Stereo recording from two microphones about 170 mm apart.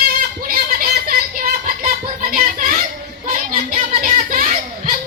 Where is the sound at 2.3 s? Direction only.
55° right (ahead or behind).